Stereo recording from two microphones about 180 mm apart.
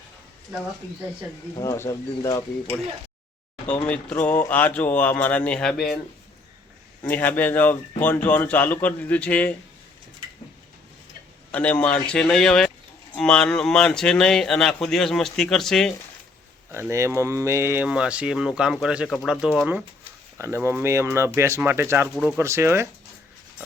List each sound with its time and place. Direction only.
1.5 s speech: 15° left (ahead or behind)
3.8 s speech: 5° left (ahead or behind)
7.0 s speech: 10° left (ahead or behind)
11.5 s speech: 10° left (ahead or behind)
16.9 s speech: 15° right (ahead or behind)
20.4 s speech: 15° right (ahead or behind)
22.1 s speech: centre (ahead or behind)
22.4 s speech: 15° right (ahead or behind)